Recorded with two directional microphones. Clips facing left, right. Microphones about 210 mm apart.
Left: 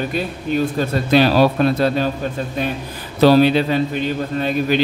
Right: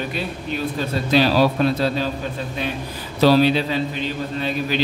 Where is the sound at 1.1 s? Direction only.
55° left (ahead or behind).